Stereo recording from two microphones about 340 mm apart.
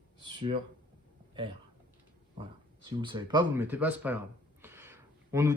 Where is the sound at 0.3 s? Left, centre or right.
Centre.